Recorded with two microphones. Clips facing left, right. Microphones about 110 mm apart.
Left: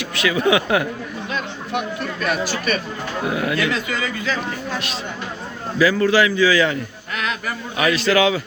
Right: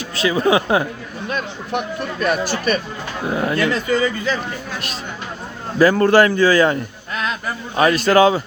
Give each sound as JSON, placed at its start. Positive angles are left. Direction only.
{"t": 0.0, "sound": "speech", "side_deg": -35}
{"t": 2.2, "sound": "a man's voice", "side_deg": -45}
{"t": 5.8, "sound": "a man's voice", "side_deg": -50}
{"t": 7.8, "sound": "a man's voice", "side_deg": -45}